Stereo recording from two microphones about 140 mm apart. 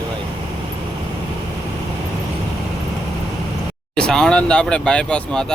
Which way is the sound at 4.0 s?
5° left (ahead or behind).